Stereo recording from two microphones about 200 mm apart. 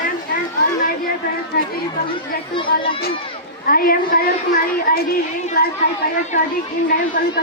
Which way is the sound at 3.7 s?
45° left (ahead or behind).